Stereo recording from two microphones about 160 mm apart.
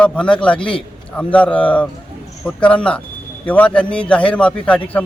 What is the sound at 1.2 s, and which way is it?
Speech, 10° left (ahead or behind).